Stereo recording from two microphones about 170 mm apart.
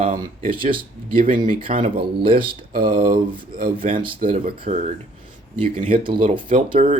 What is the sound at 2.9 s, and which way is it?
Speech, 55° right (ahead or behind).